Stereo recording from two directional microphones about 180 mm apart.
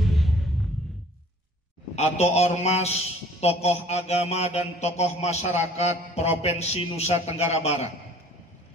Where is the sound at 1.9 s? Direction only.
35° left (ahead or behind).